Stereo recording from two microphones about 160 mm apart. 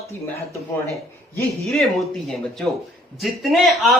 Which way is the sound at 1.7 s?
Centre (ahead or behind).